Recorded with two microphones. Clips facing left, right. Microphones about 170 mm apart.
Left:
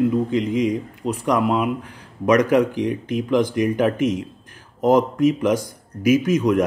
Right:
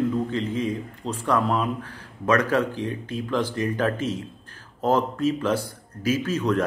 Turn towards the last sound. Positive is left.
turn(degrees=15)  # may be behind; listen again after turning